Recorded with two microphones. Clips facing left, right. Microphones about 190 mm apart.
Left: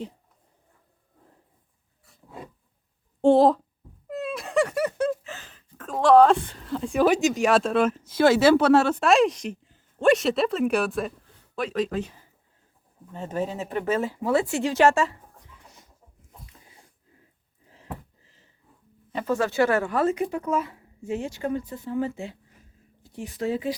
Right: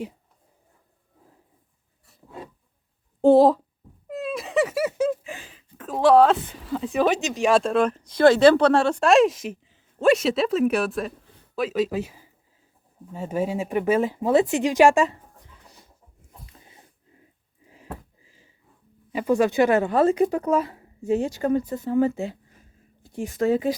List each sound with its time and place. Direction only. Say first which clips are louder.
3.2 s a woman's voice: right 2 dB; centre (ahead or behind)
15.6 s chicken: right 1 dB; 35° right (ahead or behind)
17.7 s a sound: even; 10° right (ahead or behind)
19.1 s speech: right 4 dB; 15° right (ahead or behind); by 23.7 s 45° right (ahead or behind)